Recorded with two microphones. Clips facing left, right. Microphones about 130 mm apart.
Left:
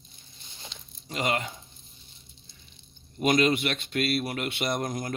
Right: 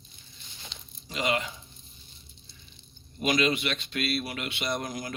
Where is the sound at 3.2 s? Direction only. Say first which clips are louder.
Left 3 dB; 45° left (ahead or behind).